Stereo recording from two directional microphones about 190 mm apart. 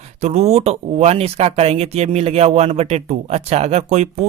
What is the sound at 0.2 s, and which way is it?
Speech, 35° right (ahead or behind).